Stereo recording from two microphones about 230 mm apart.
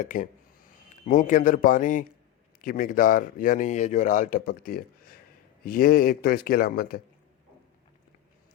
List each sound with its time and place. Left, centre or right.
0.1 s a man's voice: left